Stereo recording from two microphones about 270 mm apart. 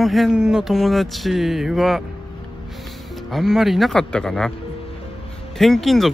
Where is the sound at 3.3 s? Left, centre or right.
Centre.